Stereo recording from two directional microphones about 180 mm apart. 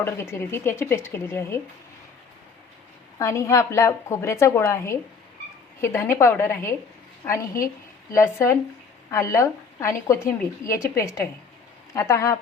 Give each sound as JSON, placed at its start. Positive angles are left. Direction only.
{"t": 0.0, "sound": "a woman's voice", "side_deg": 15}
{"t": 3.2, "sound": "a woman's voice", "side_deg": 15}